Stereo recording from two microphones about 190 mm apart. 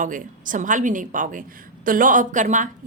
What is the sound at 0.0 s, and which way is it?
A woman's voice, 45° right (ahead or behind).